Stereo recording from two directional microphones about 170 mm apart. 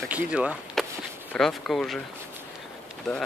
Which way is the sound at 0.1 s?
5° right (ahead or behind).